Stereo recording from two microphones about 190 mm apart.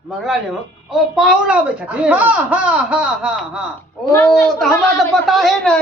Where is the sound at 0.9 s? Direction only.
Centre (ahead or behind).